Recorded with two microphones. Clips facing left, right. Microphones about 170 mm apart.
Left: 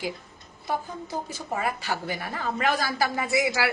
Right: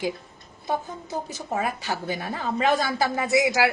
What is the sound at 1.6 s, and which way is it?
A woman's voice, 20° right (ahead or behind).